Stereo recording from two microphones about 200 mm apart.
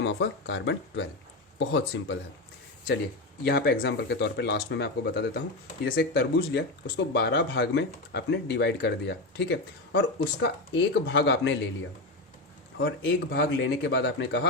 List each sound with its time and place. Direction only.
0.0 s speech: 65° left (ahead or behind)
3.4 s speech: 55° left (ahead or behind)
12.8 s speech: 55° left (ahead or behind)